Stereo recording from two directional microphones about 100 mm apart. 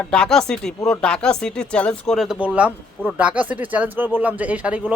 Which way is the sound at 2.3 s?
15° right (ahead or behind).